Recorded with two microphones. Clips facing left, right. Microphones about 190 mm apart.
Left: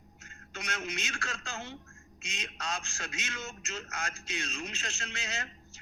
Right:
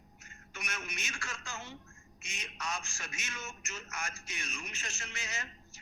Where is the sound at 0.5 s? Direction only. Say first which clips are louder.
Left 6 dB; 75° left (ahead or behind).